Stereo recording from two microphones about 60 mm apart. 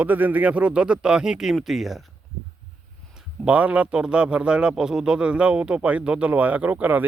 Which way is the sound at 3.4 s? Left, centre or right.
Right.